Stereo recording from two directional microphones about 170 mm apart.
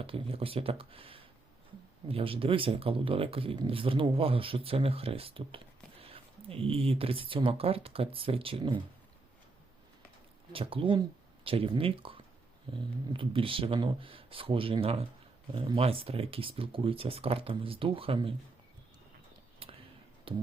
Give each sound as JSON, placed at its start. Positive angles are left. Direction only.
{"t": 0.0, "sound": "speech", "side_deg": -35}
{"t": 10.5, "sound": "speech", "side_deg": -30}
{"t": 19.6, "sound": "a sound", "side_deg": -35}
{"t": 20.3, "sound": "speech", "side_deg": -30}